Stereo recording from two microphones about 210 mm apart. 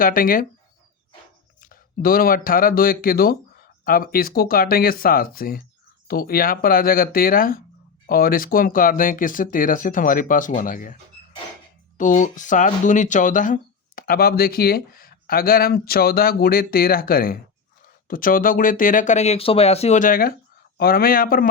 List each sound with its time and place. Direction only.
0.0 s speech: 40° left (ahead or behind)
1.6 s speech: 45° left (ahead or behind)
11.9 s speech: 35° left (ahead or behind)